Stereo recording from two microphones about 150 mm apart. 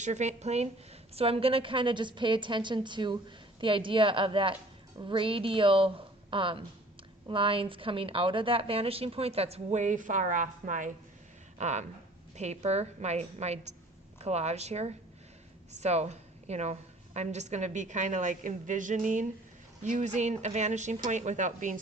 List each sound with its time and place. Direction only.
0.0 s a woman's voice: 50° right (ahead or behind)